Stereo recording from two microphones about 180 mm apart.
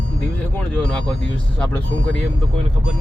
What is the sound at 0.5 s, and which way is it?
Speech, 5° left (ahead or behind).